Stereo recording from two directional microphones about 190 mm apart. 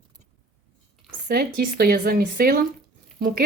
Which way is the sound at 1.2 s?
55° right (ahead or behind).